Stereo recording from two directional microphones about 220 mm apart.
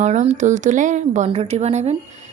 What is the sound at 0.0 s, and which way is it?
A woman's voice, 30° right (ahead or behind).